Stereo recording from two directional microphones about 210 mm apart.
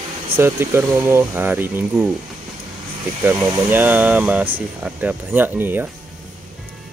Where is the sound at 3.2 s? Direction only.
10° right (ahead or behind).